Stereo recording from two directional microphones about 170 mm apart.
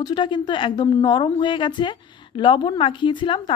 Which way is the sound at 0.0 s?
25° left (ahead or behind).